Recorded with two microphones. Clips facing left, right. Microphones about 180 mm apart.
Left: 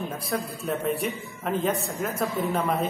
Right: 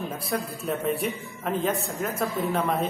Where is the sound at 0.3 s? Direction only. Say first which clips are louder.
Even; centre (ahead or behind).